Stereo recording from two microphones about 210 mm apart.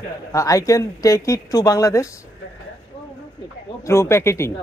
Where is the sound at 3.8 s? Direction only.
15° left (ahead or behind).